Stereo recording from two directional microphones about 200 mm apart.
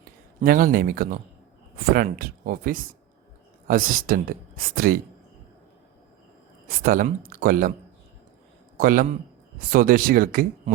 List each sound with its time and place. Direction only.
0.4 s speech: 45° right (ahead or behind)
6.7 s speech: 45° right (ahead or behind)
8.8 s speech: 45° right (ahead or behind)